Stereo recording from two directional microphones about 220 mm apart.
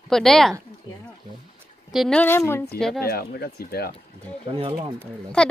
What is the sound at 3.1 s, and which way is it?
Speech, 45° left (ahead or behind).